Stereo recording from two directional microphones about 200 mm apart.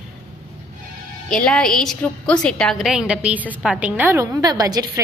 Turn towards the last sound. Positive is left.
turn(degrees=-20)  # may be behind; listen again after turning